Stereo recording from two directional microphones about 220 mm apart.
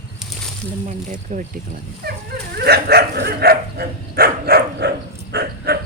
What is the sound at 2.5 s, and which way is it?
Speech, 45° right (ahead or behind).